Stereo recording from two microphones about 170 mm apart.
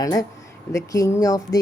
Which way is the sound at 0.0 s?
20° left (ahead or behind).